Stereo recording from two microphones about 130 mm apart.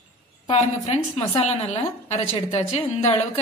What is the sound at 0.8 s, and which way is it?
Speech, 60° left (ahead or behind).